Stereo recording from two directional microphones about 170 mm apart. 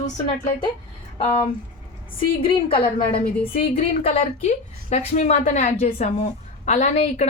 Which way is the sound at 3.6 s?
35° left (ahead or behind).